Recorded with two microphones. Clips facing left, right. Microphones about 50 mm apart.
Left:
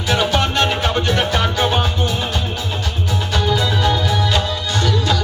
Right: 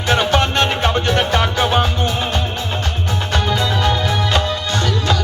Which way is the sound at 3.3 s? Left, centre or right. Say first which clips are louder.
Even; right.